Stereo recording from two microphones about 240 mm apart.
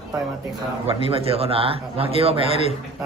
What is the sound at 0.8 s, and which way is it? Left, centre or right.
A man's voice, right.